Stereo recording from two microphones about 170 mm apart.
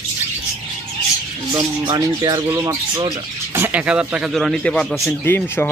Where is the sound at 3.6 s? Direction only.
10° right (ahead or behind).